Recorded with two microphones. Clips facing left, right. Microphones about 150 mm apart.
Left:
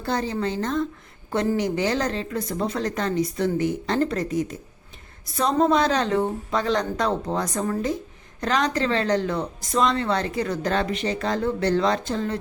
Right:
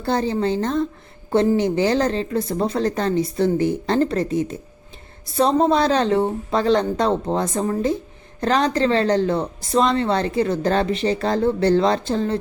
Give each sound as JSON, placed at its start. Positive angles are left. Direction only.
{"t": 0.0, "sound": "a woman's voice", "side_deg": -30}